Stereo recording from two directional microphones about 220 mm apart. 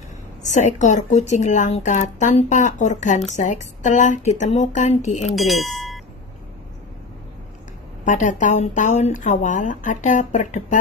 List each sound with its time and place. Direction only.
0.4 s speech: 35° left (ahead or behind)
5.3 s speech: centre (ahead or behind)
8.0 s speech: 35° left (ahead or behind)